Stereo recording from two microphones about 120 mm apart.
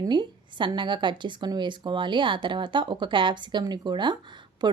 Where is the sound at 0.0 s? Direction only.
40° right (ahead or behind).